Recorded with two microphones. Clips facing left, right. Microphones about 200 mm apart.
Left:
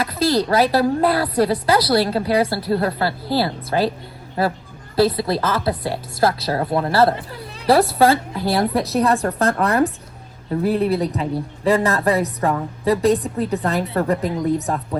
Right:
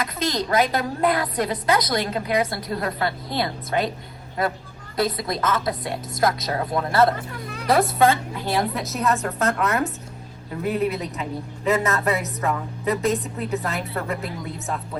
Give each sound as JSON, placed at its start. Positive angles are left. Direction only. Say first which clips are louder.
{"t": 0.0, "sound": "a woman's voice", "louder": "left 7 dB", "side_deg": 30}